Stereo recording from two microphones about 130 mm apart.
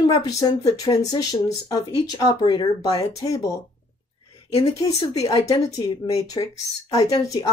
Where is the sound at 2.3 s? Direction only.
35° left (ahead or behind).